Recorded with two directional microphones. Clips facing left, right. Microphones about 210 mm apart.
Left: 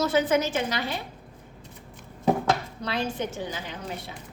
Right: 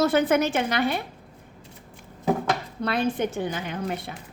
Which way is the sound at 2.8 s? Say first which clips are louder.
Right 5 dB; 55° right (ahead or behind).